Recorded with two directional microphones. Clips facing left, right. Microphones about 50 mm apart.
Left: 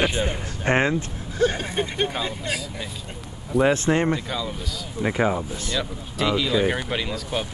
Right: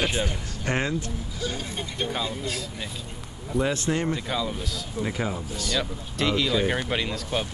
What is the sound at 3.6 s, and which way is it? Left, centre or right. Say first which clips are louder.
Speech: left 6 dB; left.